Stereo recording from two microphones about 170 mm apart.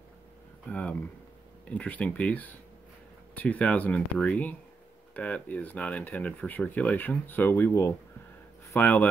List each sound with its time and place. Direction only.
0.7 s speech: 10° left (ahead or behind)